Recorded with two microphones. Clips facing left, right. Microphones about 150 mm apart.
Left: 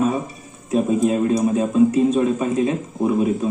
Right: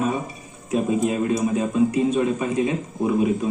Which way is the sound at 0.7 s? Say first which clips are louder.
Left 3 dB; 25° left (ahead or behind).